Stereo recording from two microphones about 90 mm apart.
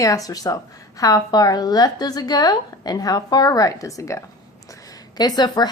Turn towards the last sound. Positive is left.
turn(degrees=50)  # may be behind; listen again after turning